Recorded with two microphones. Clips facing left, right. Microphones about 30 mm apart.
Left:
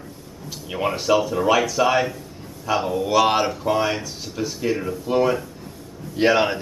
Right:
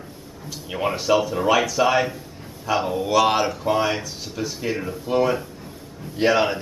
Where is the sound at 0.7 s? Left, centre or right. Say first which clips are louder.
Even; centre.